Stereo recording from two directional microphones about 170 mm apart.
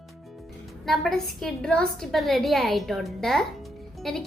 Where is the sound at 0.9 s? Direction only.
Centre (ahead or behind).